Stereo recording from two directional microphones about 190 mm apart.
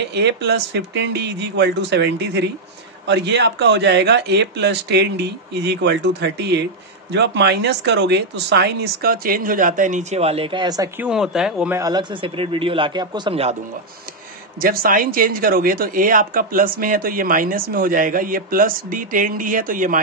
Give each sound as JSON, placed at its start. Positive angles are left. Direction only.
{"t": 0.0, "sound": "a man's voice", "side_deg": -60}
{"t": 11.0, "sound": "speech", "side_deg": -5}
{"t": 11.8, "sound": "a man's voice", "side_deg": -20}
{"t": 14.6, "sound": "speech", "side_deg": -50}